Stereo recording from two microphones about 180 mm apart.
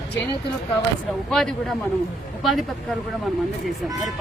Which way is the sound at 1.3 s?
Centre (ahead or behind).